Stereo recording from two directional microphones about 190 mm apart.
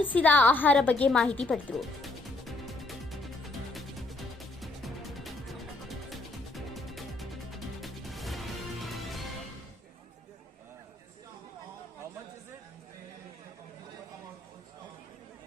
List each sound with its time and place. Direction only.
0.0 s a woman's voice: 10° left (ahead or behind)
2.5 s music: centre (ahead or behind)